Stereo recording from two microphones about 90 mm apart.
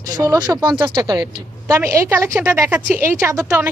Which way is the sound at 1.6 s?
35° right (ahead or behind).